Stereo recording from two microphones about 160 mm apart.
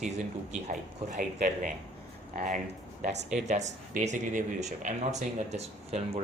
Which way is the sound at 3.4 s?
45° right (ahead or behind).